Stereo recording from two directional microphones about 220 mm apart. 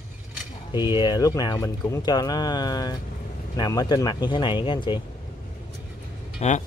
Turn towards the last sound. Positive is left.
turn(degrees=30)  # may be behind; listen again after turning